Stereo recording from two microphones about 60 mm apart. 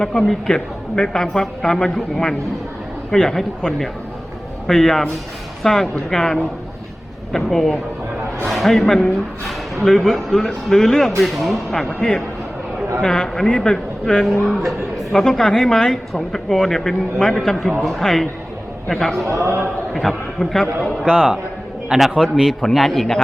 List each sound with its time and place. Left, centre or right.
0.0 s a woman's voice: centre
19.3 s a man's voice: right
19.9 s a man's voice: centre
21.8 s a man's voice: centre